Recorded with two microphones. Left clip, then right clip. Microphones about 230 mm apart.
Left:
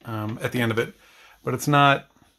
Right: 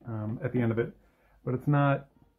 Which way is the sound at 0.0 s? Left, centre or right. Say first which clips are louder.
Left 7 dB; left.